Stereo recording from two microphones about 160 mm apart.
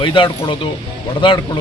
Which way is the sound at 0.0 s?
30° left (ahead or behind).